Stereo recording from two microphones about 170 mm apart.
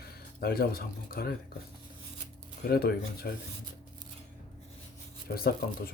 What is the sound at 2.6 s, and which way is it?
Speech, 65° left (ahead or behind).